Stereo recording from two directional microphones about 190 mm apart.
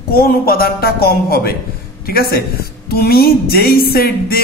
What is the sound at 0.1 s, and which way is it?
A man's voice, 50° left (ahead or behind).